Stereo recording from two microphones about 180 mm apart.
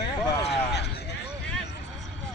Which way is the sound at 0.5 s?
65° left (ahead or behind).